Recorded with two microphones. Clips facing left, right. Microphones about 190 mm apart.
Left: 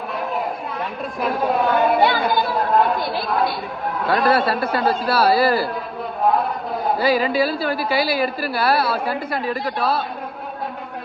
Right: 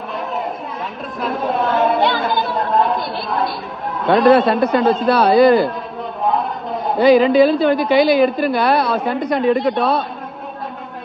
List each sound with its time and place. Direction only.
1.2 s chatter: centre (ahead or behind)
4.0 s a woman's voice: centre (ahead or behind)
7.0 s a woman's voice: 5° left (ahead or behind)